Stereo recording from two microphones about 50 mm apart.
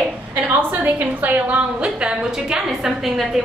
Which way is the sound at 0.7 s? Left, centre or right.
Right.